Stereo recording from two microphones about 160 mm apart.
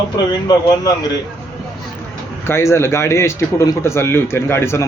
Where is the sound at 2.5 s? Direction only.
15° left (ahead or behind).